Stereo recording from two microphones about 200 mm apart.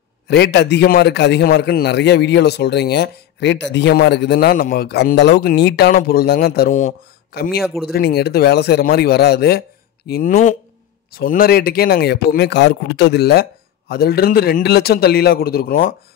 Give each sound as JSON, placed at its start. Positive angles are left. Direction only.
{"t": 0.3, "sound": "a man's voice", "side_deg": 60}